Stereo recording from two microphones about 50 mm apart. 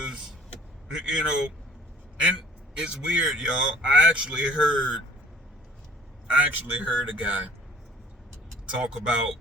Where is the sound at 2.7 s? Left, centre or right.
Centre.